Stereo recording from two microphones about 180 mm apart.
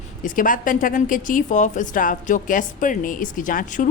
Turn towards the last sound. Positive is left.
turn(degrees=50)  # may be behind; listen again after turning